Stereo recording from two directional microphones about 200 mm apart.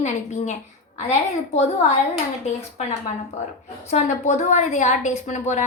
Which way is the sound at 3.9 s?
35° left (ahead or behind).